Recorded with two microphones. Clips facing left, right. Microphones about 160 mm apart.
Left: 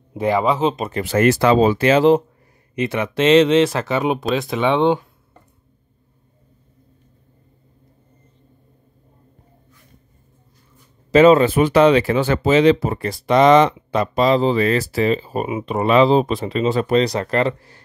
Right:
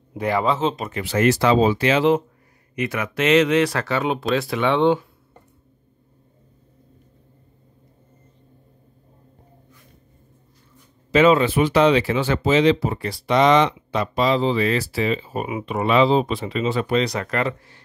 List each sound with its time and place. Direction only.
0.1 s speech: 20° left (ahead or behind)
0.8 s speech: 45° left (ahead or behind)
2.7 s speech: 25° left (ahead or behind)
11.1 s speech: 40° left (ahead or behind)